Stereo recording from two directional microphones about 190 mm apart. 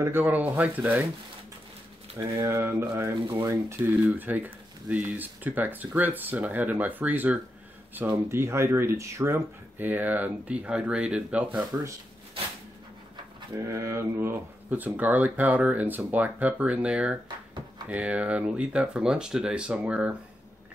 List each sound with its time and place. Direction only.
0.0 s speech: 10° right (ahead or behind)
2.1 s speech: 15° right (ahead or behind)
11.5 s speech: 20° right (ahead or behind)
13.7 s speech: 15° right (ahead or behind)